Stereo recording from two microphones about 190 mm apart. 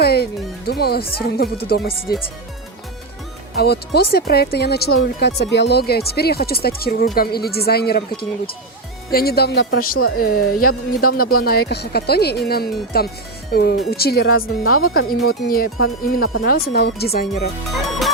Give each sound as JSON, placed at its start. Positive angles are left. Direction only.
{"t": 0.0, "sound": "music", "side_deg": 55}
{"t": 0.6, "sound": "speech", "side_deg": 55}
{"t": 3.5, "sound": "speech", "side_deg": 55}